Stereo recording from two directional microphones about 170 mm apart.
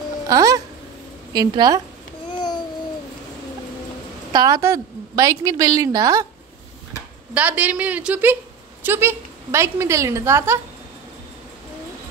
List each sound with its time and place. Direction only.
0.3 s a woman's voice: 20° right (ahead or behind)
4.3 s a woman's voice: 20° right (ahead or behind)
7.3 s a woman's voice: 10° right (ahead or behind)